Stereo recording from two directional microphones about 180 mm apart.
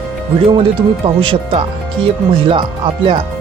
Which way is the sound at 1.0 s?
25° right (ahead or behind).